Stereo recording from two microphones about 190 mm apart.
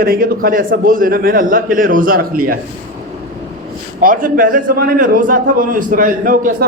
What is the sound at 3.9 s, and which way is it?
A man's voice, 45° right (ahead or behind).